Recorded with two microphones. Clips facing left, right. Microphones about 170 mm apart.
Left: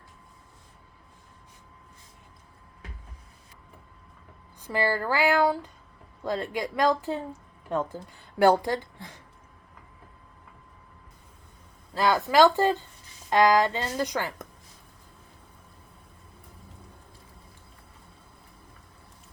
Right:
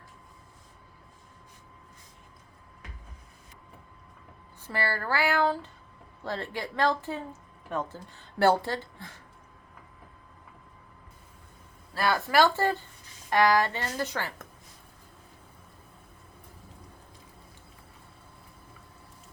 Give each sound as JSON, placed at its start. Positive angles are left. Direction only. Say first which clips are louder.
{"t": 4.6, "sound": "speech", "louder": "left 5 dB", "side_deg": 15}
{"t": 11.9, "sound": "speech", "louder": "left 4 dB", "side_deg": 15}